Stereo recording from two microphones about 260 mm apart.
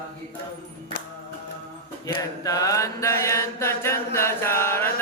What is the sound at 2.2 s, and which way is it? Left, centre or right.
Chant, centre.